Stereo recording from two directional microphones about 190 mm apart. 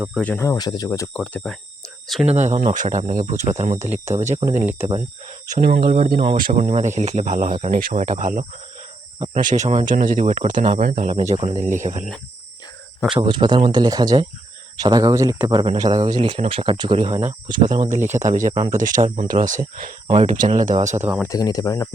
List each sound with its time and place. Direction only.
0.2 s speech: 10° left (ahead or behind)
2.2 s speech: 35° right (ahead or behind)
5.5 s speech: 45° right (ahead or behind)
5.8 s speech: 35° right (ahead or behind)
6.1 s speech: 45° right (ahead or behind)
13.1 s speech: 25° right (ahead or behind)
21.2 s speech: 15° left (ahead or behind)